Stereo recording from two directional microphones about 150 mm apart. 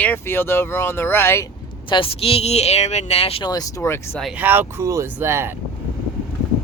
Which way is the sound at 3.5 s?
20° left (ahead or behind).